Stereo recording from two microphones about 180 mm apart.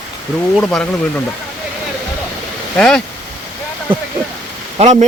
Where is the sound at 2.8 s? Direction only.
5° left (ahead or behind).